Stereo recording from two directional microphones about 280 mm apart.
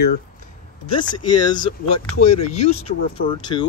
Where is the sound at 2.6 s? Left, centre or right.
Left.